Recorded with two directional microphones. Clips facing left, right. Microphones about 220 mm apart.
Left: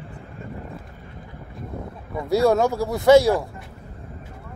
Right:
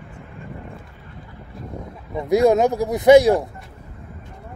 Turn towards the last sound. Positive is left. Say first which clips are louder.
# right 3 dB
turn(degrees=-15)  # may be behind; listen again after turning